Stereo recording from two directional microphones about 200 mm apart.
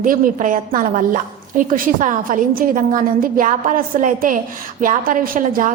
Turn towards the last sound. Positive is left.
turn(degrees=-45)  # may be behind; listen again after turning